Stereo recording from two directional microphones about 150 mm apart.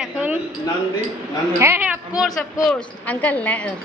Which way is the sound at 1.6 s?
10° right (ahead or behind).